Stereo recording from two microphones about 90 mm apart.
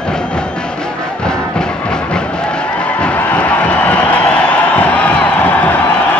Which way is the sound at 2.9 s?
15° left (ahead or behind).